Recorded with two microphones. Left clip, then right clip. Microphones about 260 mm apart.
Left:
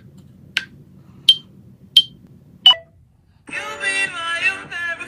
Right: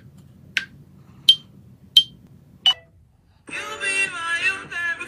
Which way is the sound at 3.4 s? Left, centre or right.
Centre.